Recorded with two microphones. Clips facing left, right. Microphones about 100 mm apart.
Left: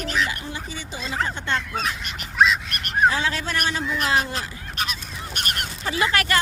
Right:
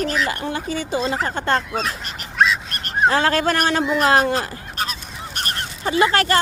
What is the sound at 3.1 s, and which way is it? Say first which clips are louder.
Speech: right 7 dB; 55° right (ahead or behind).